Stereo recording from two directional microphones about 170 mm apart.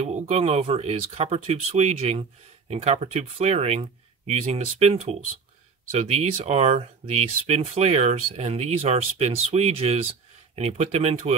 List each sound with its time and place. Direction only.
0.0 s speech: 40° right (ahead or behind)